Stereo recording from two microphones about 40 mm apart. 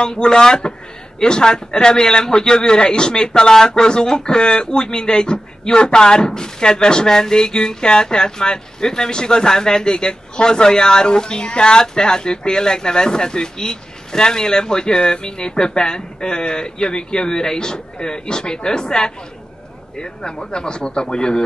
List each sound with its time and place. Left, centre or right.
0.0 s a man's voice: centre